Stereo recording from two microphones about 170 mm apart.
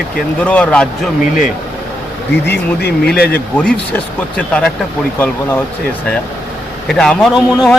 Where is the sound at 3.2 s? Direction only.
5° left (ahead or behind).